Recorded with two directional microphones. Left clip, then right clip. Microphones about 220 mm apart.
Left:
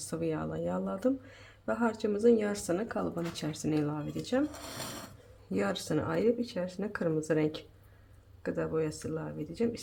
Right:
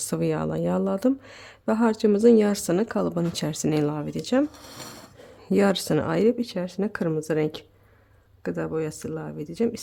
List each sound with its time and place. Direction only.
0.0 s speech: 45° right (ahead or behind)
5.5 s speech: 45° right (ahead or behind)